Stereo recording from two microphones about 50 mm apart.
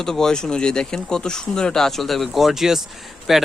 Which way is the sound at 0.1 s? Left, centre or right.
Centre.